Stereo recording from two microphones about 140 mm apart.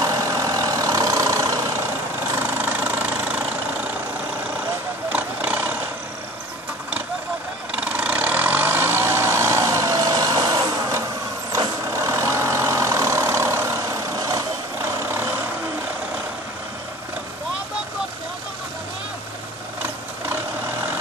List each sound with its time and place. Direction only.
0.0 s vehicle: 25° right (ahead or behind)
5.1 s vehicle: 10° right (ahead or behind)
7.7 s vehicle: 10° right (ahead or behind)